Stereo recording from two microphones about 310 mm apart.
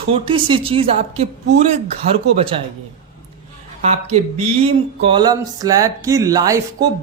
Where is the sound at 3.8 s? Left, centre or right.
Right.